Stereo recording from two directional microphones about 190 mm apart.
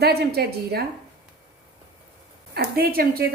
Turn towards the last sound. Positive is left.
turn(degrees=-50)  # may be behind; listen again after turning